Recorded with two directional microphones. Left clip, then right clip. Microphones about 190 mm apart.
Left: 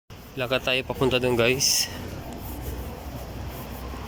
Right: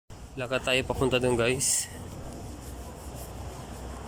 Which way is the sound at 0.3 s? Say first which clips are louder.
Left 3 dB; centre (ahead or behind).